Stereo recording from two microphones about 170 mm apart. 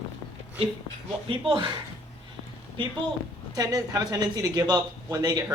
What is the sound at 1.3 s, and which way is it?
Speech, 30° right (ahead or behind).